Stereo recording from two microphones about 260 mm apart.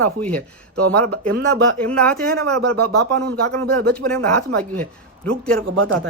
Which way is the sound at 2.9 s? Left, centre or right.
Right.